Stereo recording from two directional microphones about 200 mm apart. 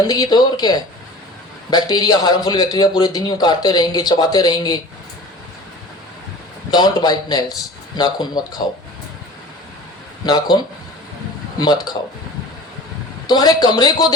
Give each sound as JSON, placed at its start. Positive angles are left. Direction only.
{"t": 0.1, "sound": "a man's voice", "side_deg": 20}
{"t": 6.7, "sound": "a man's voice", "side_deg": 20}
{"t": 10.2, "sound": "a man's voice", "side_deg": 20}
{"t": 11.6, "sound": "a man's voice", "side_deg": 20}
{"t": 13.2, "sound": "a man's voice", "side_deg": 20}